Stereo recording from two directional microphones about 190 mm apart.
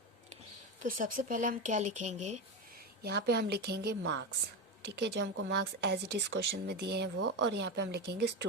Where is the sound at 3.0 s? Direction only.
55° right (ahead or behind).